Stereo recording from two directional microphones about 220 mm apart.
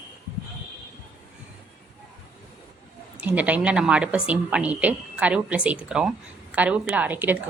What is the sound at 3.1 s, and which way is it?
A woman's voice, 5° right (ahead or behind).